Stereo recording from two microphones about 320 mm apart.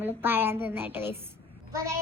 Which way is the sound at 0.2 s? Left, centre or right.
Centre.